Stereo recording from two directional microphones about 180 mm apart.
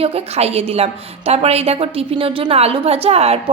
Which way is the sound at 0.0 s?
35° right (ahead or behind).